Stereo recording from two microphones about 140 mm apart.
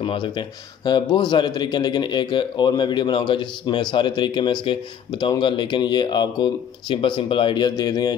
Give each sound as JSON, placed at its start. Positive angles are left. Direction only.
{"t": 0.0, "sound": "a man's voice", "side_deg": 35}